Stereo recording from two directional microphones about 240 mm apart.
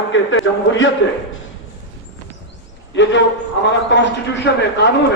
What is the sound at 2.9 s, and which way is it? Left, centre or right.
A man's voice, left.